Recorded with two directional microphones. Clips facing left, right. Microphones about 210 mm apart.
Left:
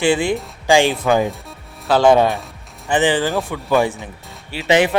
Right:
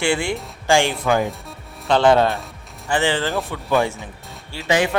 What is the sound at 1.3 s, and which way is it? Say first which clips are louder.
Music: left 1 dB; centre (ahead or behind).